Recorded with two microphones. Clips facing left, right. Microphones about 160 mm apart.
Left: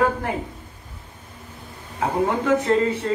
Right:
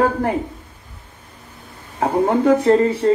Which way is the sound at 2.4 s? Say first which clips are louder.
Right 7 dB; 40° right (ahead or behind).